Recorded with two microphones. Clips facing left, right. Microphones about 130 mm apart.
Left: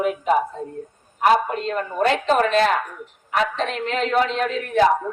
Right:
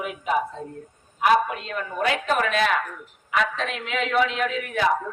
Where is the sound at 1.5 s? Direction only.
40° left (ahead or behind).